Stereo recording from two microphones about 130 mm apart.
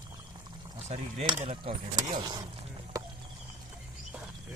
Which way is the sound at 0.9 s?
55° right (ahead or behind).